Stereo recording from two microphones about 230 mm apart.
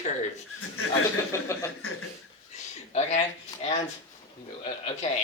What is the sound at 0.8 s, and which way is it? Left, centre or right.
Speech, left.